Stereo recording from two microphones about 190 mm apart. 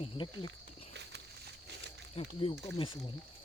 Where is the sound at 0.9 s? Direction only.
65° right (ahead or behind).